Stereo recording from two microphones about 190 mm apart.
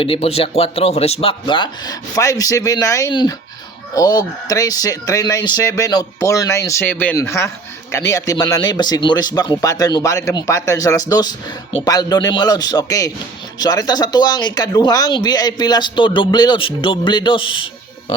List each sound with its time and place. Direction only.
0.0 s speech: 30° left (ahead or behind)